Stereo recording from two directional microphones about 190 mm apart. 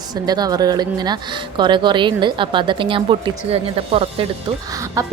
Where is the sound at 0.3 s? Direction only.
20° right (ahead or behind).